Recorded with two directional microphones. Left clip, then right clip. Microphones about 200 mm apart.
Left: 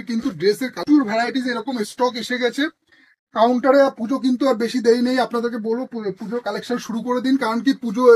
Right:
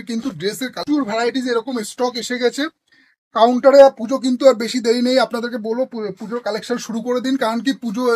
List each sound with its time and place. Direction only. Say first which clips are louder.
0.1 s speech: left 4 dB; 50° right (ahead or behind)